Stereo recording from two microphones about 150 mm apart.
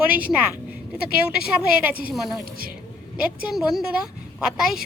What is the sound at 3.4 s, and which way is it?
A woman's voice, centre (ahead or behind).